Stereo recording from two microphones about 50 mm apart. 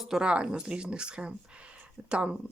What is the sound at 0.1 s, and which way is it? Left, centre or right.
Speech, centre.